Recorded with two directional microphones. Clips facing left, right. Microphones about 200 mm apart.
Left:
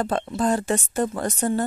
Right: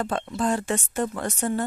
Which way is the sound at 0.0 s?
35° left (ahead or behind).